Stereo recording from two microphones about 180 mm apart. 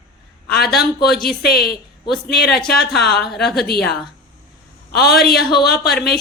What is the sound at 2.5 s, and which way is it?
Speech, 5° left (ahead or behind).